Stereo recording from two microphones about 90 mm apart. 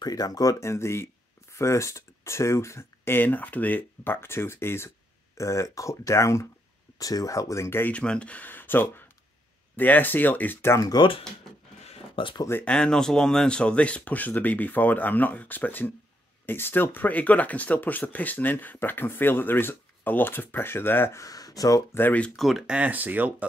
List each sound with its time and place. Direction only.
0.0 s speech: 45° left (ahead or behind)
7.8 s speech: 10° left (ahead or behind)
10.8 s speech: 50° left (ahead or behind)
12.2 s speech: 75° left (ahead or behind)
12.6 s speech: 10° left (ahead or behind)
21.2 s speech: 40° left (ahead or behind)
21.9 s speech: 20° left (ahead or behind)
22.3 s speech: centre (ahead or behind)
22.8 s speech: 20° right (ahead or behind)